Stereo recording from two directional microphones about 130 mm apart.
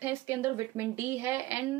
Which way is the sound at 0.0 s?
15° right (ahead or behind).